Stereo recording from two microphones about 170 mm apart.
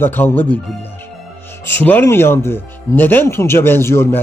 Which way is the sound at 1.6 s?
10° left (ahead or behind).